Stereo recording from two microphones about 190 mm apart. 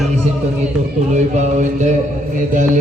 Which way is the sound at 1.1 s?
40° right (ahead or behind).